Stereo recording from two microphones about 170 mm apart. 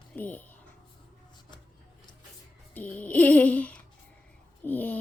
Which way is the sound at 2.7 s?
10° left (ahead or behind).